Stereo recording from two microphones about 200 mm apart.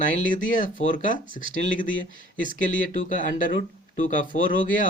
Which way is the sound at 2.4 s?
40° left (ahead or behind).